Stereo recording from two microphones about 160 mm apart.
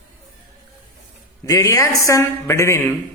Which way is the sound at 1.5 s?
20° left (ahead or behind).